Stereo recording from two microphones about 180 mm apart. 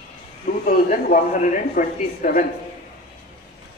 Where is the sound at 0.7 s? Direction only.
45° left (ahead or behind).